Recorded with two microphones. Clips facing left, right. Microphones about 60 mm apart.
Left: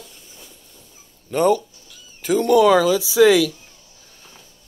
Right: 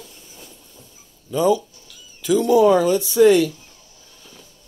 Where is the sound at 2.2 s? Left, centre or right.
Left.